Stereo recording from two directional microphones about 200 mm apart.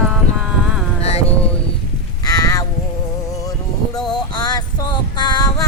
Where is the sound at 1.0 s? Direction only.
30° left (ahead or behind).